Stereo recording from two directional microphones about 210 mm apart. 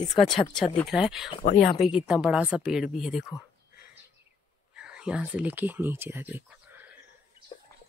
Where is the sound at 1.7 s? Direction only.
5° right (ahead or behind).